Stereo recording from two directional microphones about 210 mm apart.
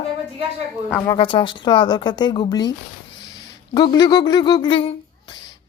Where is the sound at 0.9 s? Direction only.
10° left (ahead or behind).